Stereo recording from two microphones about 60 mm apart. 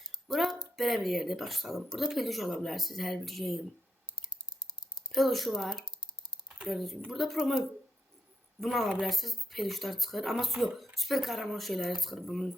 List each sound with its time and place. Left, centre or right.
0.0 s a sound: centre
0.8 s speech: centre
4.2 s clicking: left
5.1 s speech: centre
8.6 s speech: centre